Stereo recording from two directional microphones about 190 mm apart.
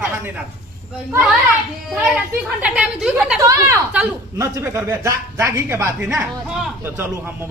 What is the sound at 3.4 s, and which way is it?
Speech, 15° right (ahead or behind).